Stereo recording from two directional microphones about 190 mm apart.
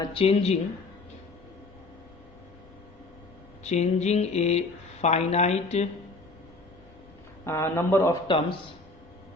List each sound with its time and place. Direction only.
0.0 s speech: 30° left (ahead or behind)
3.6 s speech: 35° left (ahead or behind)
7.4 s a man's voice: 15° left (ahead or behind)
8.3 s a man's voice: 25° left (ahead or behind)